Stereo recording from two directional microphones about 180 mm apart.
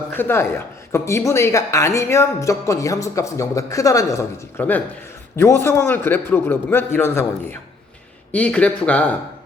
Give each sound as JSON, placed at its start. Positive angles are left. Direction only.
{"t": 0.1, "sound": "a woman's voice", "side_deg": 10}